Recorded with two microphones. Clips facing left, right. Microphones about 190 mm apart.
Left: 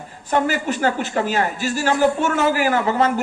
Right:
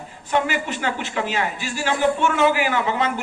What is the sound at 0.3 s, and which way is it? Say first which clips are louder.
A man's voice: left 3 dB; 45° left (ahead or behind).